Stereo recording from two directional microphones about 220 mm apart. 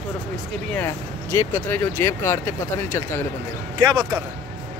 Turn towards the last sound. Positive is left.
turn(degrees=-20)  # may be behind; listen again after turning